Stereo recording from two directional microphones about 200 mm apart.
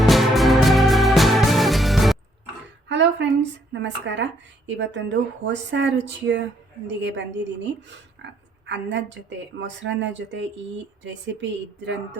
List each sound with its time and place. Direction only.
0.0 s music: centre (ahead or behind)
2.9 s a sound: 65° right (ahead or behind)
3.7 s speech: 60° right (ahead or behind)